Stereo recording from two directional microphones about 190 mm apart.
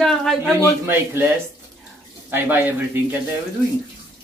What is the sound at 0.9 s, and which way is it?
A man's voice, 15° right (ahead or behind).